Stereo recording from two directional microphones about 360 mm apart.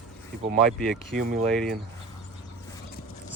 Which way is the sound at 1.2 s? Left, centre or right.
Right.